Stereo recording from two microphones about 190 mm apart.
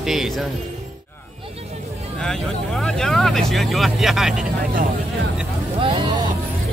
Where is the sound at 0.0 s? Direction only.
Centre (ahead or behind).